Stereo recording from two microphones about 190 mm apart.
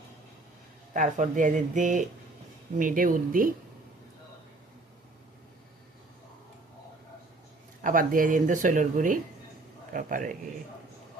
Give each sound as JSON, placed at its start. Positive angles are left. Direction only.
{"t": 0.9, "sound": "speech", "side_deg": -40}
{"t": 7.9, "sound": "speech", "side_deg": -45}